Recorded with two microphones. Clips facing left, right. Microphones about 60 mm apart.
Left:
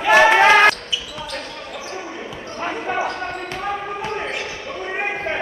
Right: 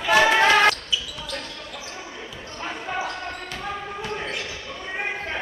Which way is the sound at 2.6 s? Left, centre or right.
Left.